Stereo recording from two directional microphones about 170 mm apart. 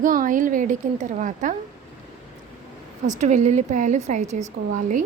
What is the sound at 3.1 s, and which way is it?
A woman's voice, 45° right (ahead or behind).